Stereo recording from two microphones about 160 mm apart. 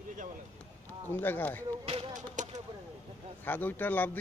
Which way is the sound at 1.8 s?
40° right (ahead or behind).